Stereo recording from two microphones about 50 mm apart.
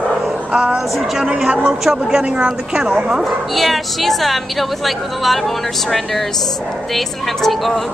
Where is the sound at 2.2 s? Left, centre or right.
Right.